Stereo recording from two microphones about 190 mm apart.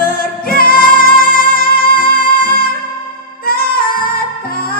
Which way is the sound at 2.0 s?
50° left (ahead or behind).